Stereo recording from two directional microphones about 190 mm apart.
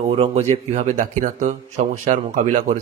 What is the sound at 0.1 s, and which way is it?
Speech, 30° right (ahead or behind).